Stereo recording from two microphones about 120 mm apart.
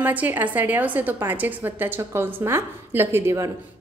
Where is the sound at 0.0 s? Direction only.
15° right (ahead or behind).